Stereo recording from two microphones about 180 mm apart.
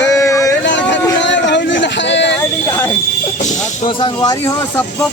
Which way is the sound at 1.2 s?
80° left.